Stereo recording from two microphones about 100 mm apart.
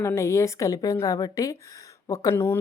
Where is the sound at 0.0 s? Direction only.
30° left (ahead or behind).